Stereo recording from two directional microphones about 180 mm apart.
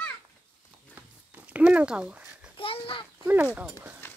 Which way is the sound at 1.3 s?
10° right (ahead or behind).